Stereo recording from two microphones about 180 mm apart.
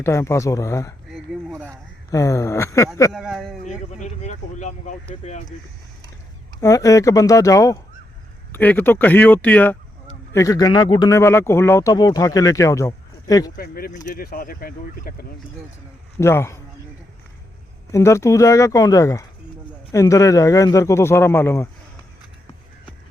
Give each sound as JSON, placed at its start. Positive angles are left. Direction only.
{"t": 0.0, "sound": "a man's voice", "side_deg": 15}
{"t": 1.1, "sound": "a sound", "side_deg": -5}
{"t": 2.0, "sound": "a man's voice", "side_deg": 15}
{"t": 3.1, "sound": "speech", "side_deg": 0}
{"t": 3.7, "sound": "speech", "side_deg": 40}
{"t": 6.6, "sound": "a man's voice", "side_deg": 20}
{"t": 13.6, "sound": "speech", "side_deg": 55}
{"t": 16.1, "sound": "a man's voice", "side_deg": 15}
{"t": 17.9, "sound": "a man's voice", "side_deg": 15}